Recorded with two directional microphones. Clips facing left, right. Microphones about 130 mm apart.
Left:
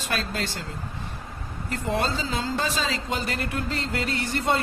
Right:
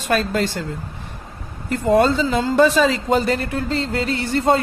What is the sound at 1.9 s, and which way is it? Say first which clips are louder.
Speech: right 11 dB; 60° right (ahead or behind).